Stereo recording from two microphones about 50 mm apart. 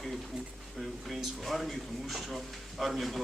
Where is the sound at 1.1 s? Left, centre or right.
Centre.